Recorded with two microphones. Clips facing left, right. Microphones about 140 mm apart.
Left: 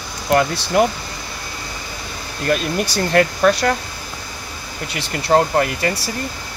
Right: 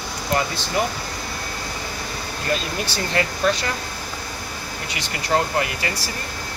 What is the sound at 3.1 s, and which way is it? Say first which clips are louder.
Speech: left 7 dB; 60° left (ahead or behind).